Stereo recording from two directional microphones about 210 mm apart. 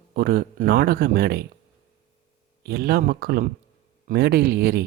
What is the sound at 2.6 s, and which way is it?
Speech, 50° right (ahead or behind).